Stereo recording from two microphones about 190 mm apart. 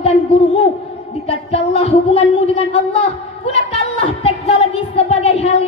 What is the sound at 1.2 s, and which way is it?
A woman's voice, 30° left (ahead or behind).